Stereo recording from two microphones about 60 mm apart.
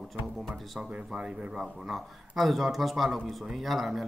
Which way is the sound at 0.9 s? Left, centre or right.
Centre.